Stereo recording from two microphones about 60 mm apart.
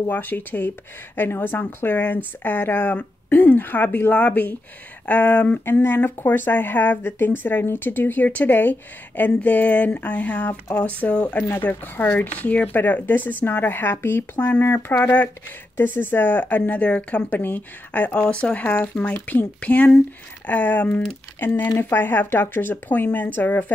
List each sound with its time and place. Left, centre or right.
0.1 s speech: left
5.7 s speech: left; by 11.4 s centre
11.6 s speech: left